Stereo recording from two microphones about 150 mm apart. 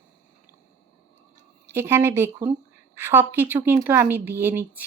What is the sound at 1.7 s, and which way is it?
Speech, 15° right (ahead or behind).